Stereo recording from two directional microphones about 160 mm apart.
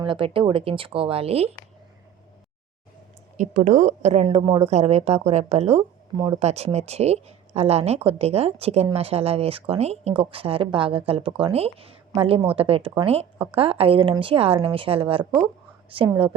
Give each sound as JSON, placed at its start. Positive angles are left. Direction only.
{"t": 0.0, "sound": "a woman's voice", "side_deg": -35}
{"t": 3.3, "sound": "a woman's voice", "side_deg": -50}
{"t": 4.7, "sound": "a woman's voice", "side_deg": -45}
{"t": 6.1, "sound": "speech", "side_deg": -25}
{"t": 6.4, "sound": "a woman's voice", "side_deg": -40}